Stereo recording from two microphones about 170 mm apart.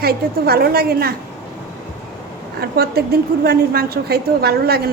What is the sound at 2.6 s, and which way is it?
A woman's voice, 65° right (ahead or behind).